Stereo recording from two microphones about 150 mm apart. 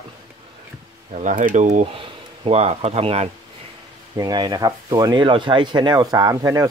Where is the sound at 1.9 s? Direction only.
40° right (ahead or behind).